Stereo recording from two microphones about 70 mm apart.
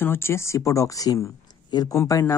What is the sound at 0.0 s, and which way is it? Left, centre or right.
Speech, left.